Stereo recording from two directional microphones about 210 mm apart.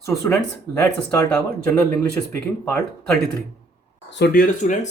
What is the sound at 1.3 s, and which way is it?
Speech, 10° left (ahead or behind).